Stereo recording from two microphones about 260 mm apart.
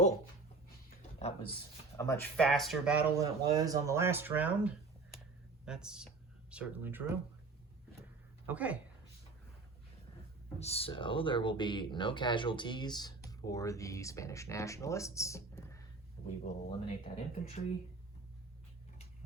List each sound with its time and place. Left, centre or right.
0.9 s a sound: left
2.0 s speech: centre
8.4 s speech: centre
10.6 s speech: left
16.2 s speech: left